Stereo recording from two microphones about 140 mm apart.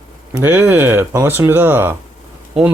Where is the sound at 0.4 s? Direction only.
10° right (ahead or behind).